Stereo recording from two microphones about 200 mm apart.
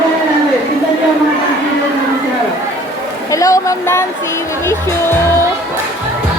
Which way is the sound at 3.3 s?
15° left (ahead or behind).